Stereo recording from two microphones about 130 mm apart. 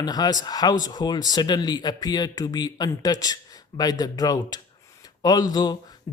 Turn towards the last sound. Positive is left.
turn(degrees=30)  # may be behind; listen again after turning